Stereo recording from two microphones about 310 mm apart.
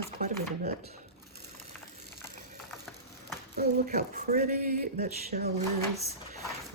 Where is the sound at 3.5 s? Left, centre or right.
Right.